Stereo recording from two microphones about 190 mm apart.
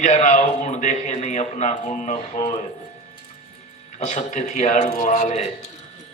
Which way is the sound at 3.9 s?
40° left (ahead or behind).